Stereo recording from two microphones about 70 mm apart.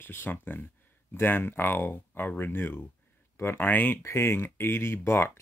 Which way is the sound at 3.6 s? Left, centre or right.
Left.